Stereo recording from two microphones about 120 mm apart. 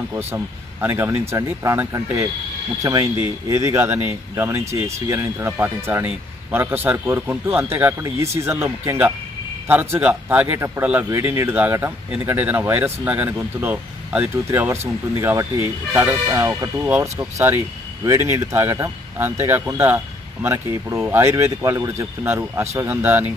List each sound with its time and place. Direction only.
0.3 s speech: 20° right (ahead or behind)